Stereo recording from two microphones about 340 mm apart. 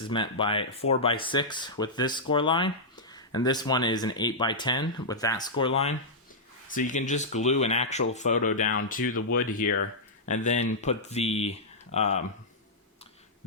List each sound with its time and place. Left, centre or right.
0.1 s speech: centre